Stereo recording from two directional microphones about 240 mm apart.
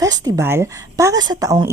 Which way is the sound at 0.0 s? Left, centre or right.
Centre.